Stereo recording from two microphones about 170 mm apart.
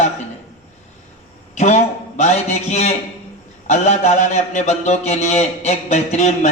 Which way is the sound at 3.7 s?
40° left (ahead or behind).